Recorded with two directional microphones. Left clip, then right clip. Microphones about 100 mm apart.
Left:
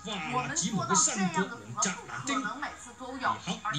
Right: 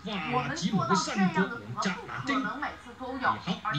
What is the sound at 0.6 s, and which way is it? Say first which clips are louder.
Speech: even; 40° left (ahead or behind).